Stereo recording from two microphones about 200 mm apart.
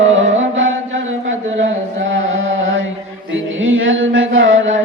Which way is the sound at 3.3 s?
75° right (ahead or behind).